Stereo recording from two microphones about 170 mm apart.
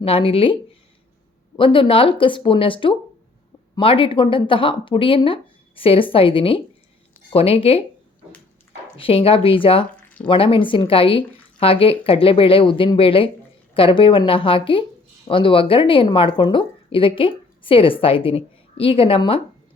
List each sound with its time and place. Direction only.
0.0 s a woman's voice: 35° left (ahead or behind)
9.0 s a woman's voice: 35° left (ahead or behind)